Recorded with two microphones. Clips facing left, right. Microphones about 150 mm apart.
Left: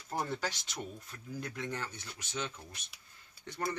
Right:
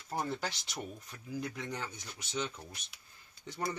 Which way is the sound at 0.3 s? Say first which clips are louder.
Left 1 dB; 15° right (ahead or behind).